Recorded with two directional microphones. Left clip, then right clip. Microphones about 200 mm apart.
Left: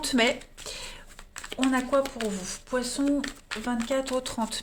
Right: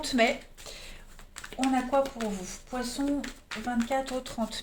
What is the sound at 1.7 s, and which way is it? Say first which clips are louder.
Speech: left 1 dB; 50° left (ahead or behind).